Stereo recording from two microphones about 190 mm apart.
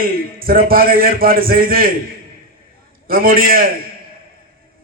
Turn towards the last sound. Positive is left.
turn(degrees=-50)  # may be behind; listen again after turning